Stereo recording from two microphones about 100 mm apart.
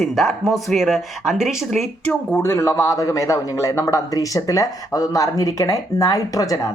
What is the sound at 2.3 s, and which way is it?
A man's voice, 30° left (ahead or behind).